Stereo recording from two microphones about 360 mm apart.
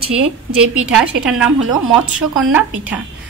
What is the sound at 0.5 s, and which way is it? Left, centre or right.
A woman's voice, centre.